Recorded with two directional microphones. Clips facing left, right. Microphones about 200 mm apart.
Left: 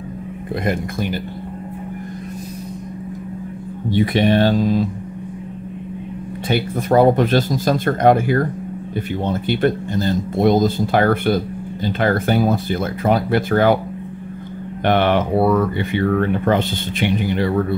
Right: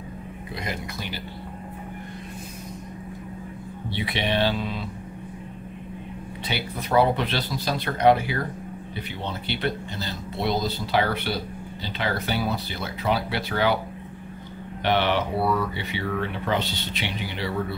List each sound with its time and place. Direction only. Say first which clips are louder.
0.7 s speech: left 12 dB; 50° left (ahead or behind)
3.9 s speech: left 11 dB; 45° left (ahead or behind)
6.4 s speech: left 11 dB; 50° left (ahead or behind)
14.8 s speech: left 7 dB; 50° left (ahead or behind)